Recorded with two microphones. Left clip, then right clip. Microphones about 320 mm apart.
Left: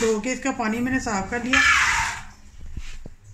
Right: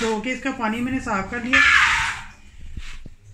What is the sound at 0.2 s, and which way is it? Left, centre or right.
Speech, left.